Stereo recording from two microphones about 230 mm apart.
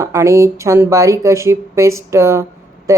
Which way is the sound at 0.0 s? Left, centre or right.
Centre.